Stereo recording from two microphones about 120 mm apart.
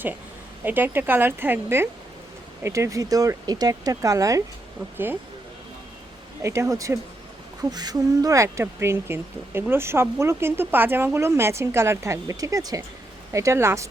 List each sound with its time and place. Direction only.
0.6 s a woman's voice: 15° right (ahead or behind)
6.4 s speech: 25° right (ahead or behind)